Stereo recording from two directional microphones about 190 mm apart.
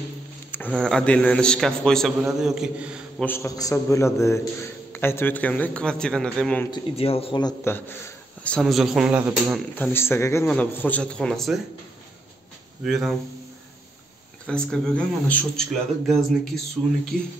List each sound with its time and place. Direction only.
0.5 s a man's voice: 10° left (ahead or behind)
3.3 s a man's voice: 15° left (ahead or behind)
6.7 s speech: 30° left (ahead or behind)
8.5 s a man's voice: centre (ahead or behind)
9.8 s a man's voice: 10° left (ahead or behind)
12.8 s a man's voice: centre (ahead or behind)
14.4 s a man's voice: 5° left (ahead or behind)